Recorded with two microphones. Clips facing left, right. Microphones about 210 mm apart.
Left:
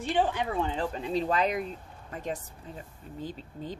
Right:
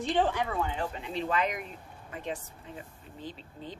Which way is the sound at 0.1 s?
10° left (ahead or behind).